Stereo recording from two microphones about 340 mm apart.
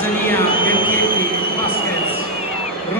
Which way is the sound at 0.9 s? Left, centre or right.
Right.